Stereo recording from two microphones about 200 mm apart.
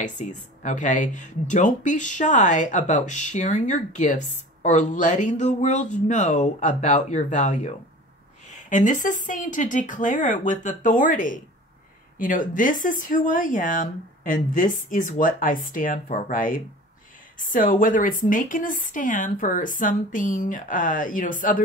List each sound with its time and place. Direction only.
0.0 s speech: 40° left (ahead or behind)